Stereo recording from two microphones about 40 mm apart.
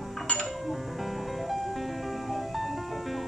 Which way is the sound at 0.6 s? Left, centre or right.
Centre.